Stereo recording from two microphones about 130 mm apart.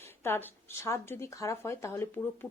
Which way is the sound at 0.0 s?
20° left (ahead or behind).